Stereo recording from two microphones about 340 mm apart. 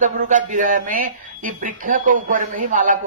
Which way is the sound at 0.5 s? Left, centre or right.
Right.